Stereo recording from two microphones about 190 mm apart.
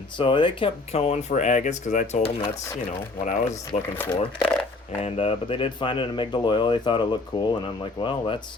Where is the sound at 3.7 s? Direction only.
35° left (ahead or behind).